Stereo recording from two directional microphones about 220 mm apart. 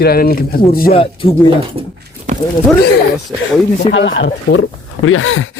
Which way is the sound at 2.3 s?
35° right (ahead or behind).